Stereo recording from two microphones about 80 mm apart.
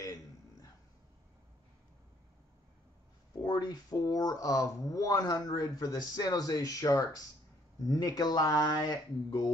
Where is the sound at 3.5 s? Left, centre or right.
Left.